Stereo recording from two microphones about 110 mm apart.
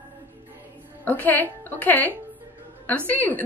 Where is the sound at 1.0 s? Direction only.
15° left (ahead or behind).